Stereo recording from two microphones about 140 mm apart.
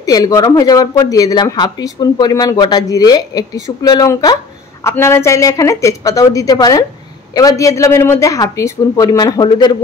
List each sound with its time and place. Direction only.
0.0 s speech: 25° left (ahead or behind)